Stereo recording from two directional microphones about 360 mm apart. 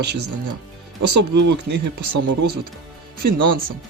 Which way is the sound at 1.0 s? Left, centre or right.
Right.